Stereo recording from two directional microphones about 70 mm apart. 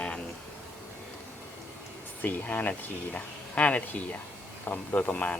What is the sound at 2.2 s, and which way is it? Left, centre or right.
Speech, left.